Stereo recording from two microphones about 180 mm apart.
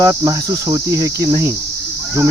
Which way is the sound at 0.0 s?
20° right (ahead or behind).